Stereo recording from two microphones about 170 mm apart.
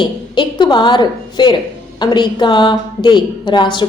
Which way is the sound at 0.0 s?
25° left (ahead or behind).